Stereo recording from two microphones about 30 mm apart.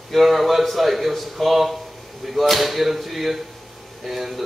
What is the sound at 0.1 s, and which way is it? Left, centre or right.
A man's voice, centre.